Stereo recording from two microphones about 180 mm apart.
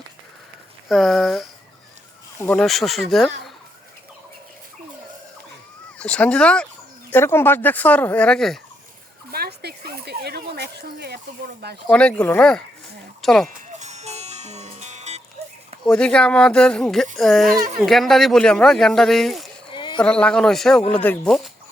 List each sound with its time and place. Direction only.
0.9 s speech: centre (ahead or behind)
2.4 s speech: 10° left (ahead or behind)
2.6 s speech: centre (ahead or behind)
6.0 s speech: 5° left (ahead or behind)
9.3 s a sound: 60° right (ahead or behind)
10.5 s speech: 65° right (ahead or behind)
11.9 s speech: 5° left (ahead or behind)
13.6 s music: 40° right (ahead or behind)
15.8 s speech: 5° left (ahead or behind)
19.7 s a sound: 25° left (ahead or behind)
20.0 s speech: 5° left (ahead or behind)